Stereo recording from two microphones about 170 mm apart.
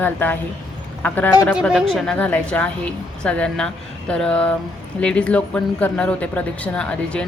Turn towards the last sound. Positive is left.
turn(degrees=5)  # may be behind; listen again after turning